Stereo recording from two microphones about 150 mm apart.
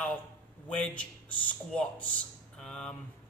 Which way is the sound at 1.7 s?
5° left (ahead or behind).